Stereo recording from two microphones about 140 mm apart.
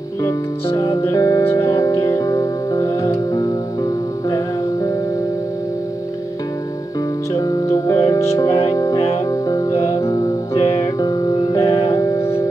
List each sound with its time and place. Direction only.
0.7 s music: 20° left (ahead or behind)
7.3 s music: 25° left (ahead or behind)